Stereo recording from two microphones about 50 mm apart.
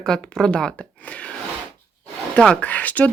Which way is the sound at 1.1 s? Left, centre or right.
Left.